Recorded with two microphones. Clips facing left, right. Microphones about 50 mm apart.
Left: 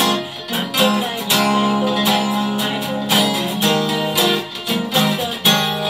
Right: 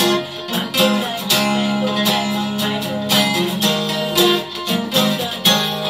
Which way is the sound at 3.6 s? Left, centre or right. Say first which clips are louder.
Left 2 dB; left.